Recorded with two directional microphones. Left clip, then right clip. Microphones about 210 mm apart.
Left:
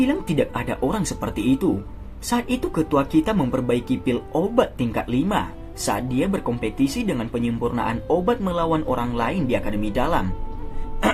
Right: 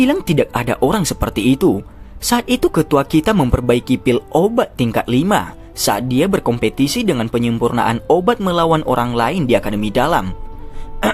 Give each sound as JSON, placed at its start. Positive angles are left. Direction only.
{"t": 0.0, "sound": "speech", "side_deg": -50}